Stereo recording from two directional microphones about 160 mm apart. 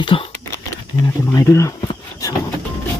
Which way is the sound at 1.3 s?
20° left (ahead or behind).